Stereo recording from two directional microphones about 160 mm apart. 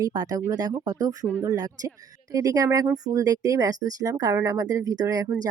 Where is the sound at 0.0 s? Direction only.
25° right (ahead or behind).